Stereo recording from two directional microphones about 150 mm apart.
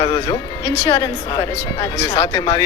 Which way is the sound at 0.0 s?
20° left (ahead or behind).